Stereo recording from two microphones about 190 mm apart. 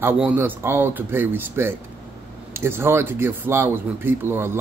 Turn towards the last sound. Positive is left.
turn(degrees=-10)  # may be behind; listen again after turning